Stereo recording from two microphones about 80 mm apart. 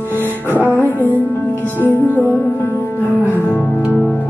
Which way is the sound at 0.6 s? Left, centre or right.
Left.